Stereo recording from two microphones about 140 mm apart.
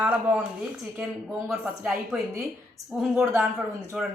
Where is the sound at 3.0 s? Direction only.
5° right (ahead or behind).